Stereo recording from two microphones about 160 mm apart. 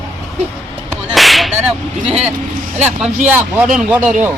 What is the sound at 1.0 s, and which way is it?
Music, centre (ahead or behind).